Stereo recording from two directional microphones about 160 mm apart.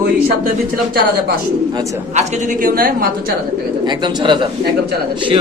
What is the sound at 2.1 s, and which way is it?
Speech, 55° right (ahead or behind).